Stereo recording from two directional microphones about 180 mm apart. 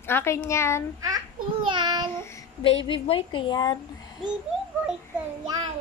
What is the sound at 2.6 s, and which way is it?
A woman's voice, 30° left (ahead or behind).